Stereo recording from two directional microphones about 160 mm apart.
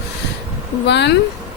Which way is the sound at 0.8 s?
90° left.